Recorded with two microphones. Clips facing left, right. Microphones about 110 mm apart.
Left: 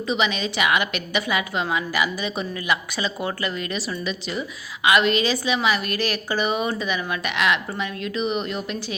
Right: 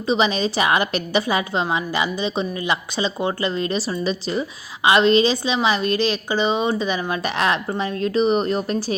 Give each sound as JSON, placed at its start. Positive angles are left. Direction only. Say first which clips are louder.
{"t": 0.0, "sound": "a woman's voice", "louder": "right 4 dB", "side_deg": -35}